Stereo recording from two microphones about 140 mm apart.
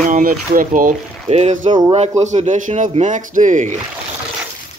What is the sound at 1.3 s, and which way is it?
Speech, 55° right (ahead or behind).